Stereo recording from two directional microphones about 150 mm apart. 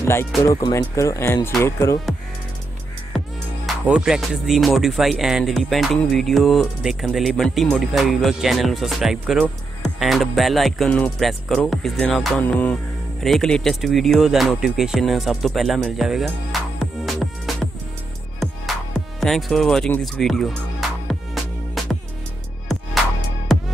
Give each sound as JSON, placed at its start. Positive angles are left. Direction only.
{"t": 0.0, "sound": "speech", "side_deg": 15}
{"t": 3.6, "sound": "music", "side_deg": -5}
{"t": 18.9, "sound": "speech", "side_deg": 0}
{"t": 20.0, "sound": "music", "side_deg": 0}
{"t": 21.8, "sound": "music", "side_deg": 0}
{"t": 23.5, "sound": "music", "side_deg": 0}